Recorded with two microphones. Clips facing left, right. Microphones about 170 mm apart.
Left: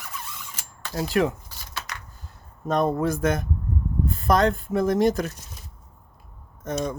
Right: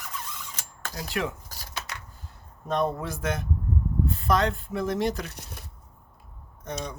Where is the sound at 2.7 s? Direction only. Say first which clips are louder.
Left 5 dB; 45° left (ahead or behind).